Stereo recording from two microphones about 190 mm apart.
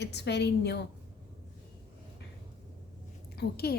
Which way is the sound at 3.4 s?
55° left (ahead or behind).